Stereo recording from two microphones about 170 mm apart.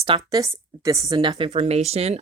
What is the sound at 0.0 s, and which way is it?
Speech, 25° right (ahead or behind).